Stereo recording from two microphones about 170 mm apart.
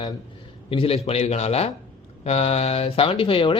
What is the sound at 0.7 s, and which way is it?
A man's voice, 35° left (ahead or behind).